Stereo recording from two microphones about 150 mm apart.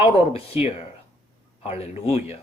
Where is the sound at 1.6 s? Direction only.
45° left (ahead or behind).